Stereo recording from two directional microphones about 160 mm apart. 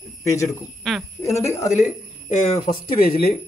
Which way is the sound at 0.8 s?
Centre (ahead or behind).